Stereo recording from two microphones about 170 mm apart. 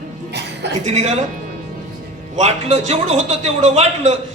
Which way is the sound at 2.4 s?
40° right (ahead or behind).